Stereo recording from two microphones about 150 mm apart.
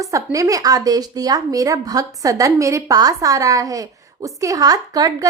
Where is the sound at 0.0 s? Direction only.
20° right (ahead or behind).